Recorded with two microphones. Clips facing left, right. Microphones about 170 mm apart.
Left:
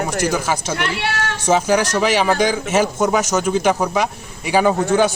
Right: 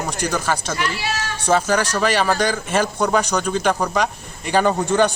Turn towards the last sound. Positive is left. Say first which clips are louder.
# left 2 dB
turn(degrees=5)  # may be behind; listen again after turning